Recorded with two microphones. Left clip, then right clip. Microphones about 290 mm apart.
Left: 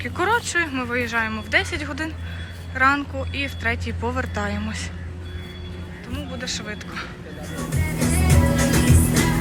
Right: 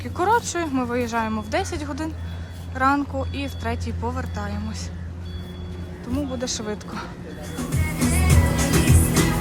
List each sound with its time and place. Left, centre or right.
0.0 s speech: centre
6.1 s speech: centre
7.5 s music: centre